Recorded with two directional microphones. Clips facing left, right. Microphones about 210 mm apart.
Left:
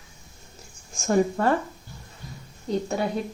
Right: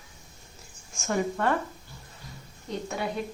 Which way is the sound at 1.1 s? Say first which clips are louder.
Left 6 dB; 40° left (ahead or behind).